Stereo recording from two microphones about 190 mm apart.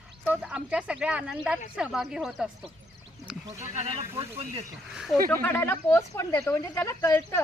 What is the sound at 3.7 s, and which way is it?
Speech, 35° right (ahead or behind).